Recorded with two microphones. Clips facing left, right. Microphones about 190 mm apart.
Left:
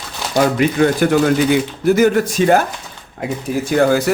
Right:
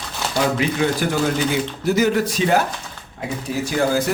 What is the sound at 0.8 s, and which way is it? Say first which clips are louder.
Speech: left 8 dB; 45° left (ahead or behind).